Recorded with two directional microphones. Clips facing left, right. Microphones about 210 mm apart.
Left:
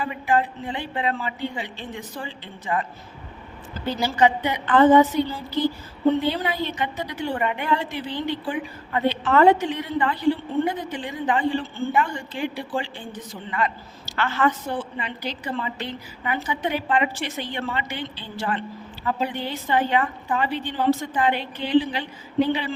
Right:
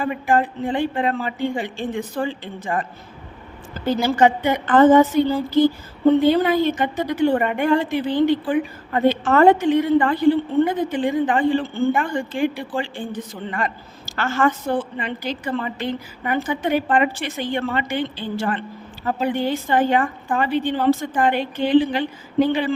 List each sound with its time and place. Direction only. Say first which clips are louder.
0.0 s a woman's voice: right 3 dB; 50° right (ahead or behind)
3.8 s a woman's voice: right 4 dB; 50° right (ahead or behind)